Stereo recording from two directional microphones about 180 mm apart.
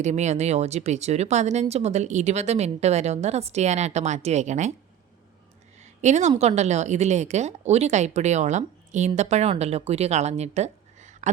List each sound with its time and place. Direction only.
0.0 s speech: 40° right (ahead or behind)
5.8 s a sound: 40° right (ahead or behind)
6.3 s speech: 35° right (ahead or behind)